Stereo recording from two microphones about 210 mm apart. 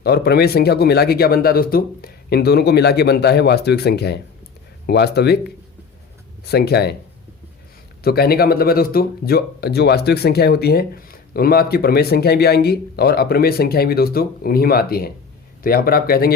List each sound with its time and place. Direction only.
0.0 s speech: 50° left (ahead or behind)
6.4 s speech: 50° left (ahead or behind)
8.0 s speech: 50° left (ahead or behind)